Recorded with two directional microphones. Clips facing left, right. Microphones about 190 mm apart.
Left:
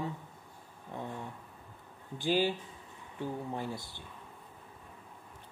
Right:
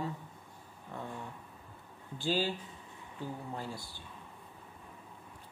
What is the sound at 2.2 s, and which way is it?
Speech, 20° left (ahead or behind).